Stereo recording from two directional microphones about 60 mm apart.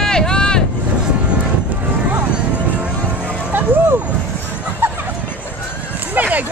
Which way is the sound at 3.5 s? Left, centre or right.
Right.